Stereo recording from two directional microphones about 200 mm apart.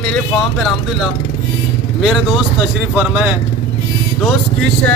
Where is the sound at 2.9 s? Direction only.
5° right (ahead or behind).